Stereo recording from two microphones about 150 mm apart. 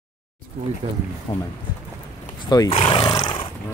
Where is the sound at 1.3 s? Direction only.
25° left (ahead or behind).